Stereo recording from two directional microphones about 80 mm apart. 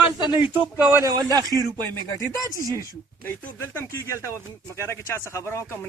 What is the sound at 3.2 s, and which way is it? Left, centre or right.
Speech, left.